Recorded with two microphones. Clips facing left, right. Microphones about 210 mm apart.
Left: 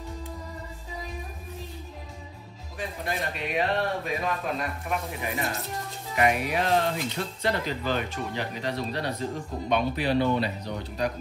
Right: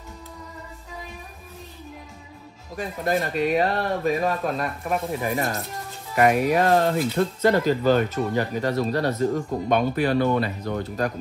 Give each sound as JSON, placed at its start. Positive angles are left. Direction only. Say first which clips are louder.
{"t": 2.7, "sound": "speech", "louder": "right 8 dB", "side_deg": -45}